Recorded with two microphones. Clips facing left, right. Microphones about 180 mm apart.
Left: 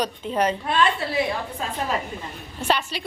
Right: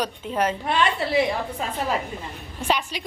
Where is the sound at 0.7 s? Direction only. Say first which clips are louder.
Even; 20° right (ahead or behind).